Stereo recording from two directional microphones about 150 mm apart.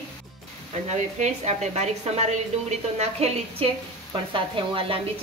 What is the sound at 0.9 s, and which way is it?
Speech, 50° right (ahead or behind).